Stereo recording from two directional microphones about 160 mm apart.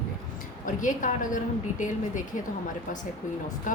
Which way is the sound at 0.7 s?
55° left (ahead or behind).